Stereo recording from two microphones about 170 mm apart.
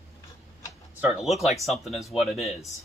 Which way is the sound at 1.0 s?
5° right (ahead or behind).